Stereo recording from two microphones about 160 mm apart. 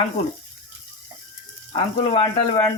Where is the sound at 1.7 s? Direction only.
35° left (ahead or behind).